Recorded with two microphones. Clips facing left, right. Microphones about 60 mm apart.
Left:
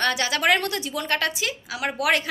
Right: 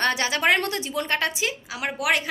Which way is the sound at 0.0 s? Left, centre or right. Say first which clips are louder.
Even; right.